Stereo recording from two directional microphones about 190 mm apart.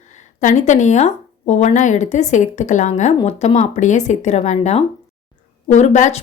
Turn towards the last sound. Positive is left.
turn(degrees=35)  # may be behind; listen again after turning